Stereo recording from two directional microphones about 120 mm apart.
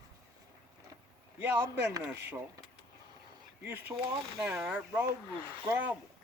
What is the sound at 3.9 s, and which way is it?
A man's voice, 5° right (ahead or behind).